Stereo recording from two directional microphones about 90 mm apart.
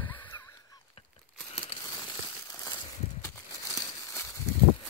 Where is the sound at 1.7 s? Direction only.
90° left.